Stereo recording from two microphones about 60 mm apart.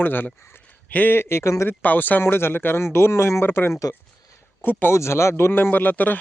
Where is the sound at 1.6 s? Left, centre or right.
Left.